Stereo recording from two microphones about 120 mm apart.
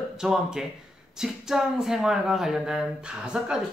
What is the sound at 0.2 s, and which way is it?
Speech, 5° right (ahead or behind).